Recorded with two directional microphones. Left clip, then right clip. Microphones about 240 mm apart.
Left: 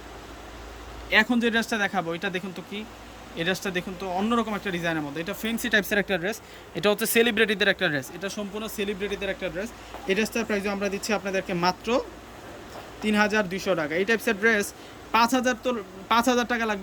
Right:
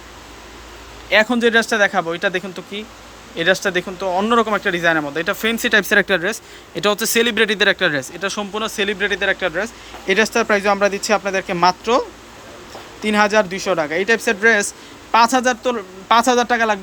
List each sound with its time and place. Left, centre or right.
1.1 s speech: centre